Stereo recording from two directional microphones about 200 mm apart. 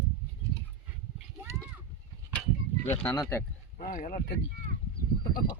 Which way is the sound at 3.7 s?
40° left (ahead or behind).